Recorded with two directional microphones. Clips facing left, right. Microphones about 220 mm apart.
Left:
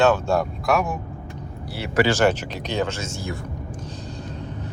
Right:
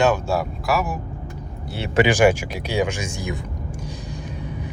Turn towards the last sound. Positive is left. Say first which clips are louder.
# right 1 dB
turn(degrees=-10)  # may be behind; listen again after turning